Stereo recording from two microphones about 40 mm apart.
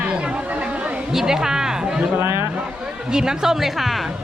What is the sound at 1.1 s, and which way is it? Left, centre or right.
Music, centre.